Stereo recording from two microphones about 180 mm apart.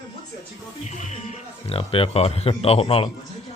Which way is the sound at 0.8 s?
40° left (ahead or behind).